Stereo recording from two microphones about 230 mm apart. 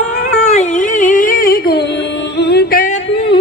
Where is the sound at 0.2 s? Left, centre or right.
Left.